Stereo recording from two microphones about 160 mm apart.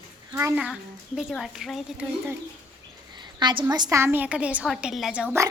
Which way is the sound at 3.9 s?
15° right (ahead or behind).